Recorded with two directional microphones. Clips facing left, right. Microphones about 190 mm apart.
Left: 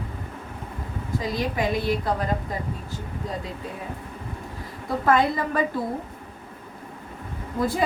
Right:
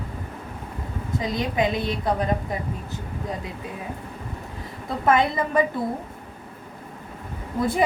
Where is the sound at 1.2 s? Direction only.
20° right (ahead or behind).